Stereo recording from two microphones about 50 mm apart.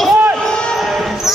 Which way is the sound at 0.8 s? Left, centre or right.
Centre.